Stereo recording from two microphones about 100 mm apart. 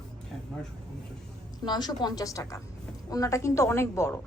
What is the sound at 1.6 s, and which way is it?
A woman's voice, 45° left (ahead or behind).